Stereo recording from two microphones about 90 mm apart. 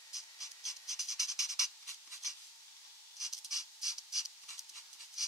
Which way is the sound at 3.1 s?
5° right (ahead or behind).